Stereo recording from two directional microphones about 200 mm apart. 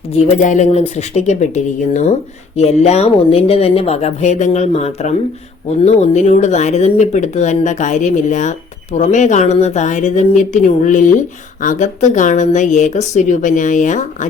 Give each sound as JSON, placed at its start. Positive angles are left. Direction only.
{"t": 0.1, "sound": "speech", "side_deg": 40}